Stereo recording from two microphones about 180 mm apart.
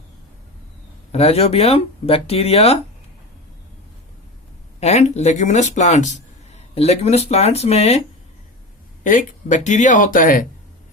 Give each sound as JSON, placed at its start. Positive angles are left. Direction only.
{"t": 1.1, "sound": "speech", "side_deg": 35}
{"t": 4.8, "sound": "speech", "side_deg": 40}
{"t": 9.0, "sound": "speech", "side_deg": 45}